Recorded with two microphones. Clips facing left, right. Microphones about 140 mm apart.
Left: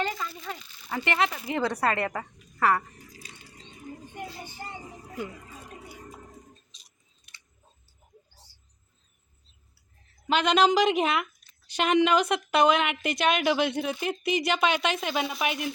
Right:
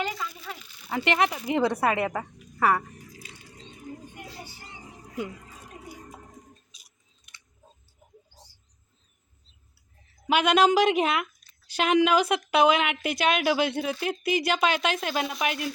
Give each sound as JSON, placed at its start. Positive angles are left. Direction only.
{"t": 0.0, "sound": "a sound", "side_deg": 0}
{"t": 1.0, "sound": "a woman's voice", "side_deg": -20}
{"t": 3.2, "sound": "wild animals", "side_deg": 35}
{"t": 6.7, "sound": "keys jangling", "side_deg": -10}
{"t": 10.2, "sound": "a woman's voice", "side_deg": -5}